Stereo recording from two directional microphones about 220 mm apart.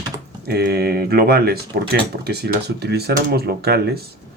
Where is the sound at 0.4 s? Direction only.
45° right (ahead or behind).